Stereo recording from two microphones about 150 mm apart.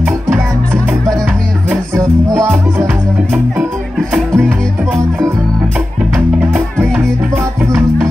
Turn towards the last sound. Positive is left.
turn(degrees=5)  # may be behind; listen again after turning